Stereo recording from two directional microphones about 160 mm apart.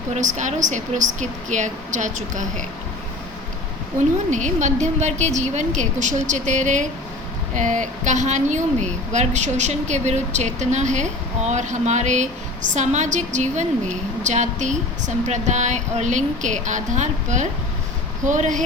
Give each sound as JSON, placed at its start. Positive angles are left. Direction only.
{"t": 0.1, "sound": "a woman's voice", "side_deg": -50}
{"t": 4.3, "sound": "a woman's voice", "side_deg": -50}